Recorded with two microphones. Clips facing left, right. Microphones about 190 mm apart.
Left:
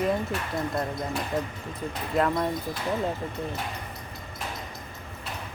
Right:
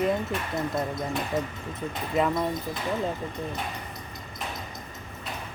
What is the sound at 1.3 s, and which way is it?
Speech, 20° right (ahead or behind).